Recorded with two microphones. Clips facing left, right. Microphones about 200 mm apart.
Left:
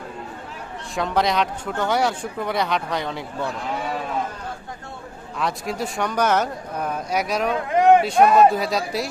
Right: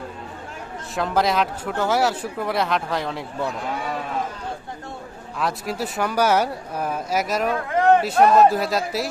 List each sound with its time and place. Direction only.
0.9 s speech: centre (ahead or behind)
5.4 s speech: centre (ahead or behind)
7.5 s speech: 15° left (ahead or behind)
8.2 s speech: centre (ahead or behind)